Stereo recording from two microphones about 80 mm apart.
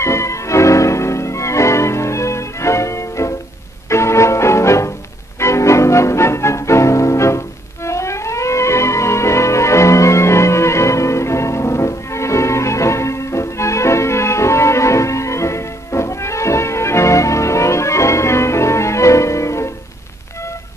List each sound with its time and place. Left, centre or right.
0.0 s music: left